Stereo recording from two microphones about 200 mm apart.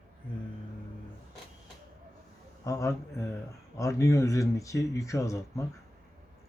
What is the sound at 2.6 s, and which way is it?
Speech, 15° left (ahead or behind).